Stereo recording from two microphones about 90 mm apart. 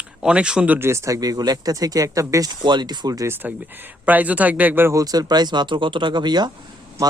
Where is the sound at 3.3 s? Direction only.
20° right (ahead or behind).